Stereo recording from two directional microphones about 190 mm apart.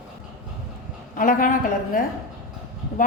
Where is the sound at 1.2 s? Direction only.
45° left (ahead or behind).